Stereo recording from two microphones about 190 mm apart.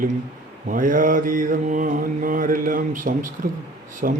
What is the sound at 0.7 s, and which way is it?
Mantra, 45° right (ahead or behind).